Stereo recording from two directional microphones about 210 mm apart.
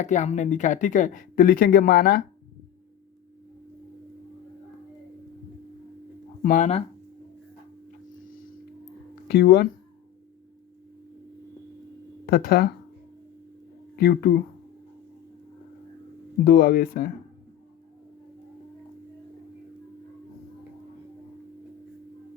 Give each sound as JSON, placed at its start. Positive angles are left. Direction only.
{"t": 0.0, "sound": "speech", "side_deg": 35}
{"t": 6.4, "sound": "speech", "side_deg": 40}
{"t": 9.2, "sound": "speech", "side_deg": 50}
{"t": 12.2, "sound": "speech", "side_deg": 45}
{"t": 13.9, "sound": "speech", "side_deg": 50}
{"t": 16.4, "sound": "speech", "side_deg": 45}